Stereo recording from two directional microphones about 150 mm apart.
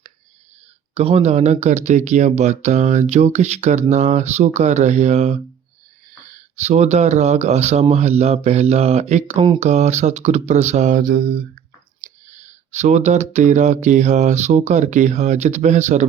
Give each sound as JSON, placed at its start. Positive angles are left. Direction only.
{"t": 0.9, "sound": "speech", "side_deg": -40}
{"t": 11.0, "sound": "mantra", "side_deg": -90}
{"t": 12.0, "sound": "speech", "side_deg": -55}